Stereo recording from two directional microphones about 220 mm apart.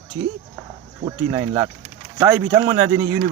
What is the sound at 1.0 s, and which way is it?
Speech, 15° right (ahead or behind).